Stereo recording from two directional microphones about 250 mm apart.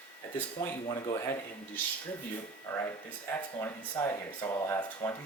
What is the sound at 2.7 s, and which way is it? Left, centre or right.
Speech, centre.